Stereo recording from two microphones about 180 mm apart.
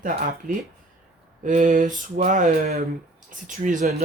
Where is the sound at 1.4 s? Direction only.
45° right (ahead or behind).